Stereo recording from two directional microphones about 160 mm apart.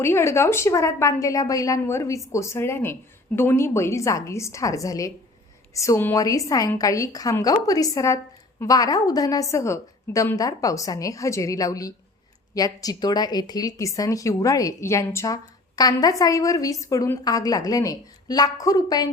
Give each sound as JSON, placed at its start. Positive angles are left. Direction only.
{"t": 0.0, "sound": "a woman's voice", "side_deg": 15}